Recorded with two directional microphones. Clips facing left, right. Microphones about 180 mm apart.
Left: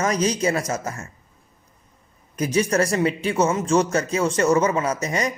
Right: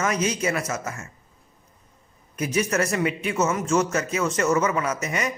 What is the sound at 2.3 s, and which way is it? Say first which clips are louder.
Speech: left 3 dB; 35° left (ahead or behind).